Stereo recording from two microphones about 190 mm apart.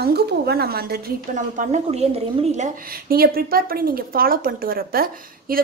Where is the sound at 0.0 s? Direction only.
55° right (ahead or behind).